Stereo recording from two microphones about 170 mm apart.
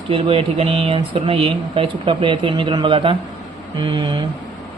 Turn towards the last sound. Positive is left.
turn(degrees=-30)  # may be behind; listen again after turning